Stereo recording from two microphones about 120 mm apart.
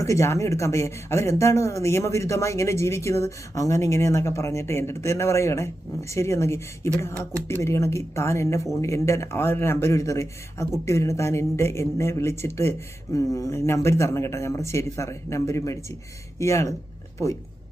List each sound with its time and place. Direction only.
0.0 s speech: 25° left (ahead or behind)